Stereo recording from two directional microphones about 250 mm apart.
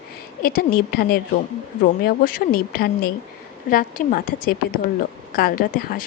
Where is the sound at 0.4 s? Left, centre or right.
Left.